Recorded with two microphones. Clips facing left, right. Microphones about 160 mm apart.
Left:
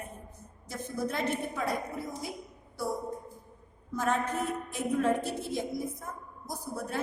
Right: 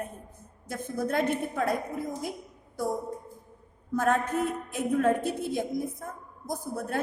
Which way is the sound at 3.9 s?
50° right (ahead or behind).